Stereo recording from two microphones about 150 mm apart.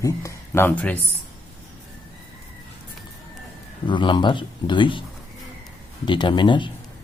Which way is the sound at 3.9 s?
30° left (ahead or behind).